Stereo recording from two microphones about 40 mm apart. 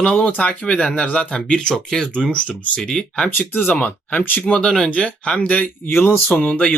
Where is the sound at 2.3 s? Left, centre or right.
Left.